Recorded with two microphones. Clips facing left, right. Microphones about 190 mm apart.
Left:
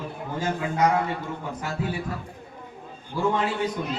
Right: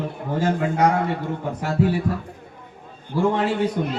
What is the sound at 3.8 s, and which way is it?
Speech, 60° right (ahead or behind).